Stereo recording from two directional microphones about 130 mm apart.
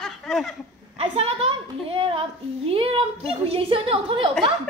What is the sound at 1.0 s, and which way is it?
A woman's voice, 50° right (ahead or behind).